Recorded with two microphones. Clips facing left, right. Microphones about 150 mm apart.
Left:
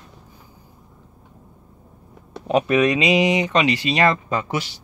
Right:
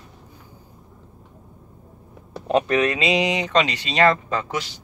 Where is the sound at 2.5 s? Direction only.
10° left (ahead or behind).